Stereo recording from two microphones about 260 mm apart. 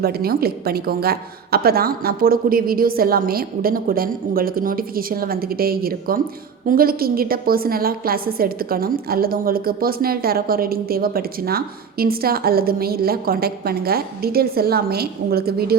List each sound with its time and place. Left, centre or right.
0.0 s a woman's voice: right